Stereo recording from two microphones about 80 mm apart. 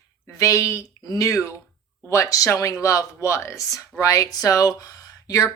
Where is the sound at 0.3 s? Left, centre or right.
Left.